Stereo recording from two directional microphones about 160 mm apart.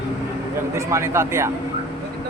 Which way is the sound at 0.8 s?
20° right (ahead or behind).